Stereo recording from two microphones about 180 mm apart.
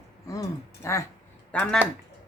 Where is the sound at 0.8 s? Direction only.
15° left (ahead or behind).